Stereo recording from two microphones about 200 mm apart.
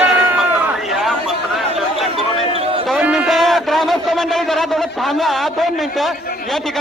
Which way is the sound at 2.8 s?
Centre (ahead or behind).